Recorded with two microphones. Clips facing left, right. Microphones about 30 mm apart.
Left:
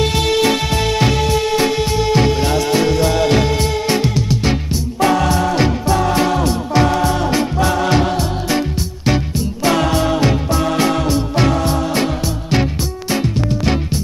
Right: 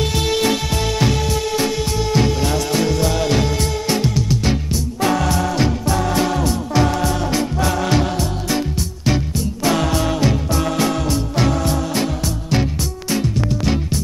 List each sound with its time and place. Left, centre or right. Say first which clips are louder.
0.0 s music: left 3 dB; left